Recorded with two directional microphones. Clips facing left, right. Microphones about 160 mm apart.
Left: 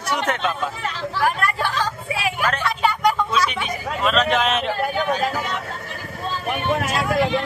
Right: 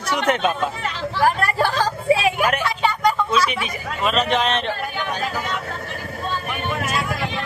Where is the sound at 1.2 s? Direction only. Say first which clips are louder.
Right 3 dB; 35° right (ahead or behind).